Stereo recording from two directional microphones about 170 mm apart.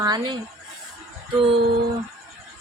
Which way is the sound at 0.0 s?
25° right (ahead or behind).